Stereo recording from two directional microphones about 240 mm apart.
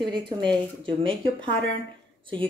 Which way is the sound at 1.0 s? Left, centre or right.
Right.